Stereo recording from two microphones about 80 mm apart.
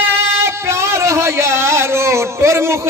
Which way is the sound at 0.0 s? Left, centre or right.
Right.